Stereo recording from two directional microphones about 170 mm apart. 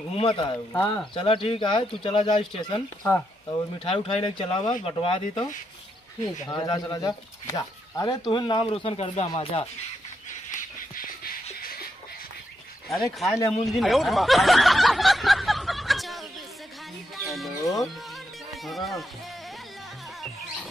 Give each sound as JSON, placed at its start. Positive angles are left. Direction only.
{"t": 0.1, "sound": "speech", "side_deg": 30}
{"t": 12.9, "sound": "speech", "side_deg": 0}
{"t": 13.7, "sound": "snicker", "side_deg": 0}
{"t": 17.3, "sound": "chicken", "side_deg": 0}
{"t": 18.5, "sound": "speech", "side_deg": 0}